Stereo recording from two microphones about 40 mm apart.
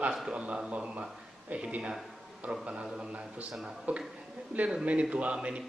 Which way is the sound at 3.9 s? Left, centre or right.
Right.